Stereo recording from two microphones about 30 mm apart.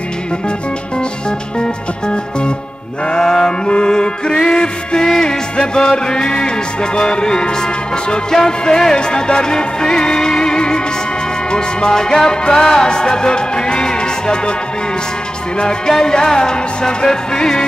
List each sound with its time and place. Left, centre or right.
1.6 s music: left
3.1 s music: left
3.6 s music: left
11.9 s music: centre
16.0 s music: left